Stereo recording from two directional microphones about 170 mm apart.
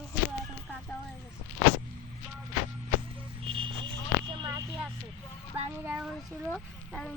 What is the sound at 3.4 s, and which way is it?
Vehicle, 30° right (ahead or behind).